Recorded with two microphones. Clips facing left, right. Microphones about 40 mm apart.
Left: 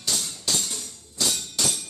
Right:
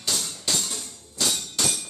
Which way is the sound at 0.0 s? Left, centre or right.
Centre.